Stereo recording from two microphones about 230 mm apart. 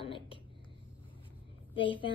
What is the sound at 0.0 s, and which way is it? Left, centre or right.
Whispering, left.